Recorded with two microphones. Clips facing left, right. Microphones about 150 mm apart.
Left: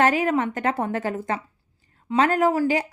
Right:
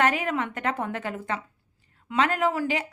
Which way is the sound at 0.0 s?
35° left (ahead or behind).